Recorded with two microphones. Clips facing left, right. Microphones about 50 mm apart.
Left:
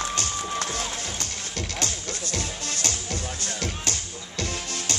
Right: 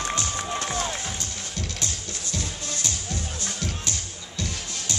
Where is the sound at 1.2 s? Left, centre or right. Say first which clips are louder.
Left 1 dB; left.